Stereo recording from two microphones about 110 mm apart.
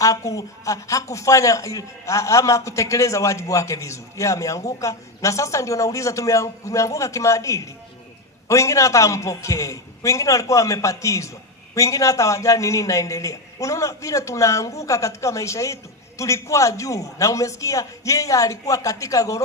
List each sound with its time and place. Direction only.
0.0 s a man's voice: 30° left (ahead or behind)